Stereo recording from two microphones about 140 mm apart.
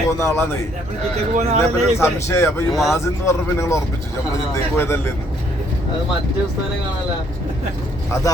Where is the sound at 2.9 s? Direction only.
20° left (ahead or behind).